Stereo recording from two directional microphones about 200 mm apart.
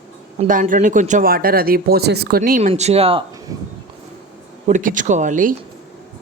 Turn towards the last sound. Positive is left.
turn(degrees=-40)  # may be behind; listen again after turning